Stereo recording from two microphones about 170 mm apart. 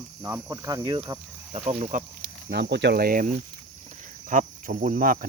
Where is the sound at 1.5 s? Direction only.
40° right (ahead or behind).